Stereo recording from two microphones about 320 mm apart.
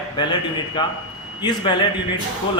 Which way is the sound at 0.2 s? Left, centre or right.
Centre.